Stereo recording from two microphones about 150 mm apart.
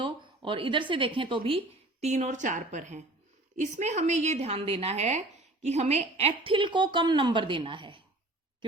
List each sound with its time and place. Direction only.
0.0 s a woman's voice: 35° right (ahead or behind)